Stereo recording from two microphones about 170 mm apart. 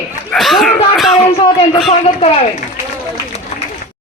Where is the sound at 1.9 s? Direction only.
35° left (ahead or behind).